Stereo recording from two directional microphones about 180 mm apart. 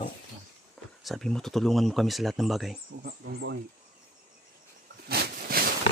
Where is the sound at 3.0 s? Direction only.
65° right (ahead or behind).